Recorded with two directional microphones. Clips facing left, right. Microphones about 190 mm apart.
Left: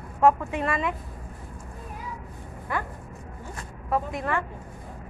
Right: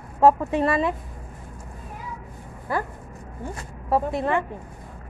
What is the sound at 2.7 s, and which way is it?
Speech, 35° right (ahead or behind).